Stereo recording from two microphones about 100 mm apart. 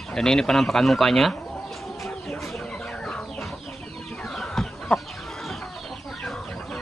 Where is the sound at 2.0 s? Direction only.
Centre (ahead or behind).